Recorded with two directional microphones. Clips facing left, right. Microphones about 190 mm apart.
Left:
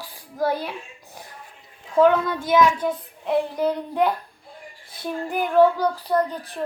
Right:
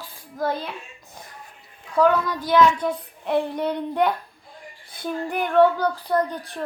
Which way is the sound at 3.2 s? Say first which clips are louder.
Left 1 dB; centre (ahead or behind).